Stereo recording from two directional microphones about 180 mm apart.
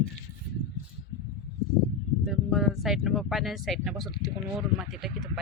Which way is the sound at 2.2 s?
Centre (ahead or behind).